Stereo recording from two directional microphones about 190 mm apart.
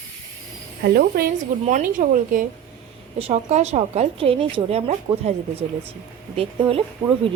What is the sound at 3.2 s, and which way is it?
A woman's voice, 35° right (ahead or behind).